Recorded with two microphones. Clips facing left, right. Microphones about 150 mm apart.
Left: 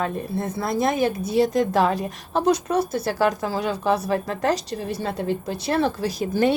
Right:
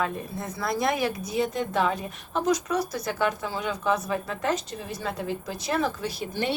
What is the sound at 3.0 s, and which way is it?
A woman's voice, 35° left (ahead or behind).